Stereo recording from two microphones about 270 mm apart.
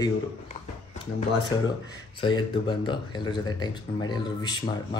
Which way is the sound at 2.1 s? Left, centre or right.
Centre.